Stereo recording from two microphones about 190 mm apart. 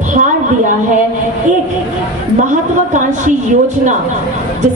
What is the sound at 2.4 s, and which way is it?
Speech, 40° right (ahead or behind).